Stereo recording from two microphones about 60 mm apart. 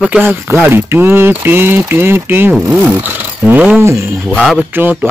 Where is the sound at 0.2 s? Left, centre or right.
Right.